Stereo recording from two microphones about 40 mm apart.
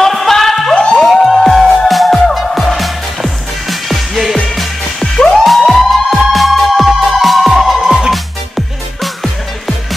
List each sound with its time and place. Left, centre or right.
0.0 s music: centre
0.7 s music: left
1.2 s music: centre
5.0 s music: centre
5.4 s music: centre